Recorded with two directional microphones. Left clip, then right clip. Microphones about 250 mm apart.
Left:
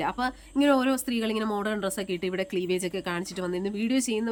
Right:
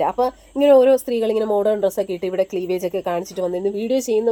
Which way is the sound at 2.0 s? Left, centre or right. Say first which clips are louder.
Right 9 dB; centre.